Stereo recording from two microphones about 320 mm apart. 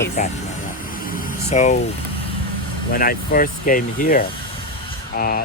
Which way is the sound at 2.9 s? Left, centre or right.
Left.